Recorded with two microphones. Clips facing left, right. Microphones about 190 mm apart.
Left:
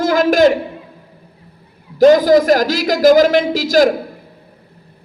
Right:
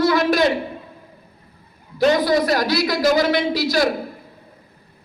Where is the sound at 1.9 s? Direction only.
45° left (ahead or behind).